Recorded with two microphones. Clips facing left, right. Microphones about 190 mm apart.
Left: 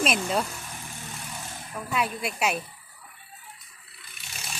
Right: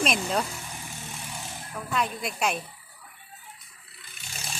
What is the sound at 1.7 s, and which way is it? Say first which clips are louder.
Speech: left 1 dB; 10° left (ahead or behind).